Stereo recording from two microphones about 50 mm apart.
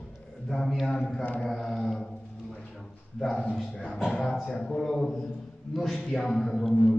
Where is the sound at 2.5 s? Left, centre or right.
Centre.